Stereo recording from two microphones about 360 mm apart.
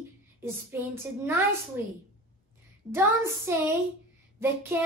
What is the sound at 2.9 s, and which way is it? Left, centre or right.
Speech, centre.